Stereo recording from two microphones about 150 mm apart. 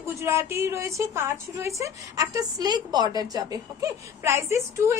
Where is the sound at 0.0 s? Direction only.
20° right (ahead or behind).